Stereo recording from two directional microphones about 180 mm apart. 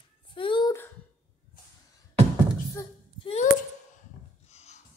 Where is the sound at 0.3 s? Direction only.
30° left (ahead or behind).